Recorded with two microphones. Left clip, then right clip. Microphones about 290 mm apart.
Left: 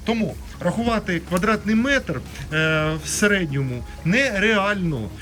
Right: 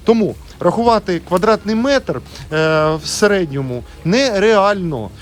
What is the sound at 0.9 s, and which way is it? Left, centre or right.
A man's voice, centre.